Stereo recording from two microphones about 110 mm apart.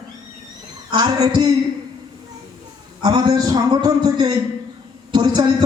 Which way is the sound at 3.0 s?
40° right (ahead or behind).